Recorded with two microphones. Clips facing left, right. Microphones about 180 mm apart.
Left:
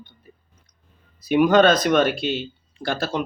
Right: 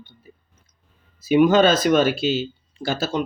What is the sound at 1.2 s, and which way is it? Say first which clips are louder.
Speech: right 1 dB; 5° right (ahead or behind).